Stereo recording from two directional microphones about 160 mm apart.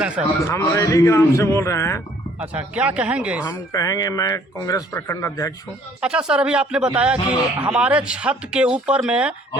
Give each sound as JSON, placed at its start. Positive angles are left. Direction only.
{"t": 0.3, "sound": "a man's voice", "side_deg": 15}
{"t": 2.4, "sound": "speech", "side_deg": -10}
{"t": 3.4, "sound": "speech", "side_deg": 20}
{"t": 6.0, "sound": "speech", "side_deg": -5}